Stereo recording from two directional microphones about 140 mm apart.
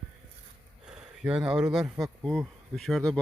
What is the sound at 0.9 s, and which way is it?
Speech, 5° right (ahead or behind).